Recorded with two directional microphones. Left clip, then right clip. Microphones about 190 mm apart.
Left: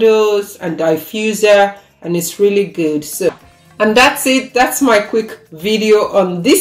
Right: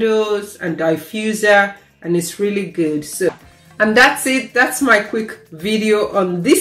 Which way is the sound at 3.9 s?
5° left (ahead or behind).